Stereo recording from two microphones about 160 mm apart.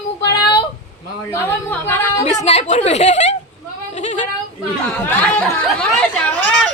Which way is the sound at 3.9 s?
45° left (ahead or behind).